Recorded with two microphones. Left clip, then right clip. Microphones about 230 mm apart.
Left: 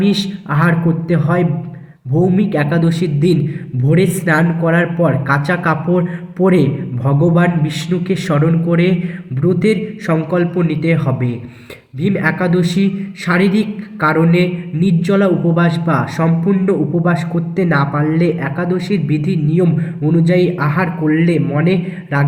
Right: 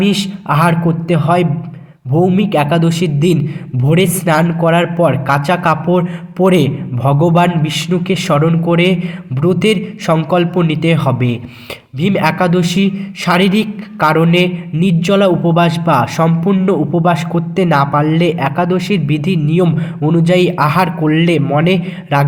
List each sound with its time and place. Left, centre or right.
0.0 s a man's voice: right